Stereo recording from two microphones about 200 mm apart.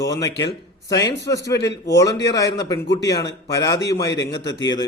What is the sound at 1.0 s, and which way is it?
Speech, 15° left (ahead or behind).